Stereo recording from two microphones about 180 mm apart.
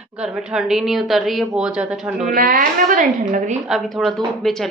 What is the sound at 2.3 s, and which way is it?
Speech, 55° right (ahead or behind).